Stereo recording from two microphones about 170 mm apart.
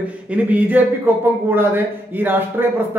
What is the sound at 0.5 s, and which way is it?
A man's voice, 10° right (ahead or behind).